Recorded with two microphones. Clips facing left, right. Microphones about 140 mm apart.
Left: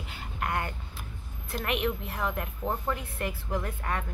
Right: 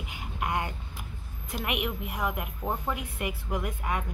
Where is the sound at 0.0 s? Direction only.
15° right (ahead or behind).